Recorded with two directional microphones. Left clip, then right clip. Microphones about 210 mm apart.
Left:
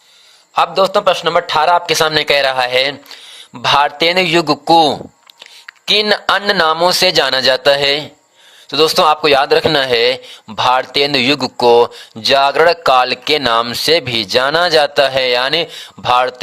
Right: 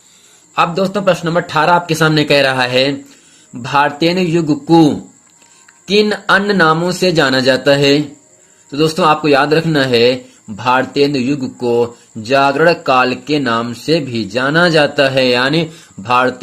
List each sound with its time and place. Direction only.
0.5 s a man's voice: 35° left (ahead or behind)